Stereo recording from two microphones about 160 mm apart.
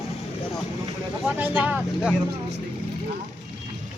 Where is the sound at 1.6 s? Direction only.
10° right (ahead or behind).